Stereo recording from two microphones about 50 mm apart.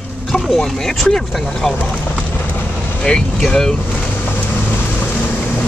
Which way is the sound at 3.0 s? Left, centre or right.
Centre.